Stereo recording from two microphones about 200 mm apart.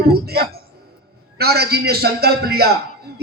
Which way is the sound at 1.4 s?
50° right (ahead or behind).